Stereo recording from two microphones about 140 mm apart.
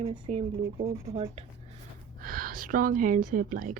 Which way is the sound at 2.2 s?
90° right.